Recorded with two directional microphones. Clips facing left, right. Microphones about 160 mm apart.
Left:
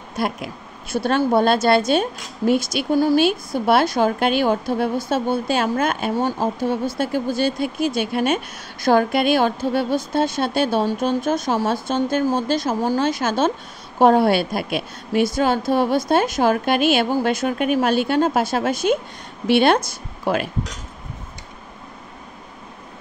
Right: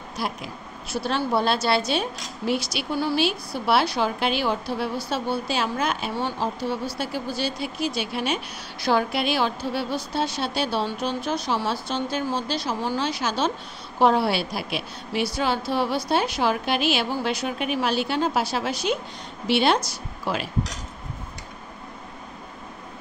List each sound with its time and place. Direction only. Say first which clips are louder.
0.1 s a woman's voice: left 6 dB; 55° left (ahead or behind)